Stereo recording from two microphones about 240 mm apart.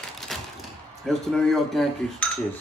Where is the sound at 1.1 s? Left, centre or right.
Centre.